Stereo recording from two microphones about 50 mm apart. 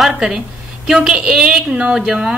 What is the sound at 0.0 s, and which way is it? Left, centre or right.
A woman's voice, centre.